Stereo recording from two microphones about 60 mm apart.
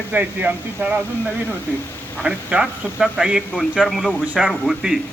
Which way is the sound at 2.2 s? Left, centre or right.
Centre.